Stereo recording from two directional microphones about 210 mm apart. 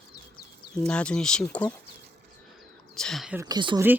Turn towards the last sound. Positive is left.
turn(degrees=-20)  # may be behind; listen again after turning